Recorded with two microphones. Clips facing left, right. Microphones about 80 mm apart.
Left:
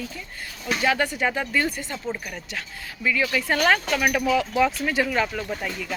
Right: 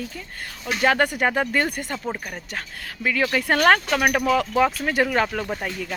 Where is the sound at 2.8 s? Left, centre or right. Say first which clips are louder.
Right 1 dB; right.